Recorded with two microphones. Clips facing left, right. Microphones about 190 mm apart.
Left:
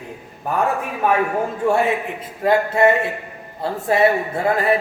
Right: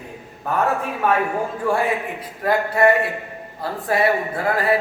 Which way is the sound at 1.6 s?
25° left (ahead or behind).